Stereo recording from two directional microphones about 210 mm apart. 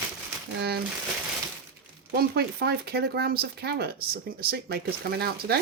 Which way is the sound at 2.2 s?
50° right (ahead or behind).